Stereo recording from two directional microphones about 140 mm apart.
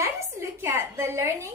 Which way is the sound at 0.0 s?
20° right (ahead or behind).